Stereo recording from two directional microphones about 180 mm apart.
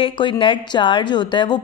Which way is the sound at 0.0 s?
30° left (ahead or behind).